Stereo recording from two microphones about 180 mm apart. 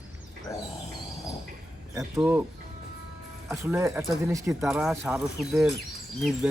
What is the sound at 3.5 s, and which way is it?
Speech, 15° right (ahead or behind).